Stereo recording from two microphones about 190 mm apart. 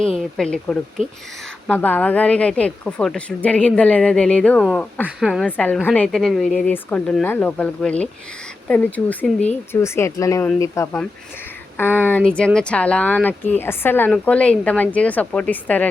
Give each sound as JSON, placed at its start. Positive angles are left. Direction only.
{"t": 0.3, "sound": "a woman's voice", "side_deg": 5}
{"t": 12.0, "sound": "a woman's voice", "side_deg": 10}